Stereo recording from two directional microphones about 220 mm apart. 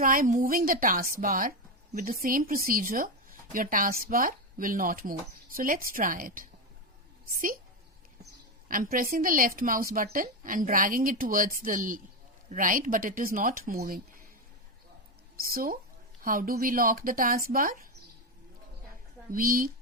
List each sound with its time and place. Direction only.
0.0 s a woman's voice: 40° right (ahead or behind)
8.2 s a woman's voice: 40° right (ahead or behind)
15.4 s a woman's voice: 40° right (ahead or behind)
19.3 s a woman's voice: 40° right (ahead or behind)